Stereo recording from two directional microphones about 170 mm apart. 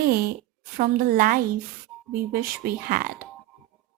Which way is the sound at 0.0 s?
60° right (ahead or behind).